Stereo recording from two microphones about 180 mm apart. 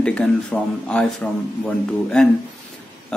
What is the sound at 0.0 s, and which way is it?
Speech, 5° left (ahead or behind).